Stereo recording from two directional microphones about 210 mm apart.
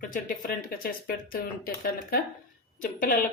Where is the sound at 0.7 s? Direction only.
45° left (ahead or behind).